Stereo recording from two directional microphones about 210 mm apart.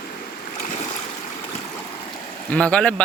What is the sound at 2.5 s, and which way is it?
Speech, 5° left (ahead or behind).